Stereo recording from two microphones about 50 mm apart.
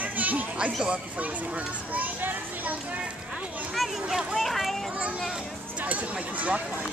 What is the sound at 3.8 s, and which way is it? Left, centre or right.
Speech, centre.